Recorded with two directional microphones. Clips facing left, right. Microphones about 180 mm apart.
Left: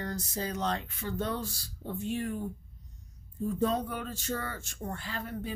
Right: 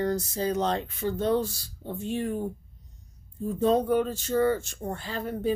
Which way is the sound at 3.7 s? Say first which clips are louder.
Right 10 dB; 30° right (ahead or behind).